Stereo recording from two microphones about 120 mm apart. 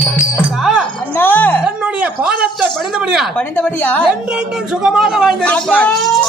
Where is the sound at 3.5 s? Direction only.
15° left (ahead or behind).